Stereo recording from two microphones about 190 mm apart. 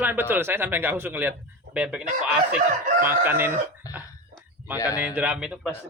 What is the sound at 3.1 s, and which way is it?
Speech, 10° right (ahead or behind).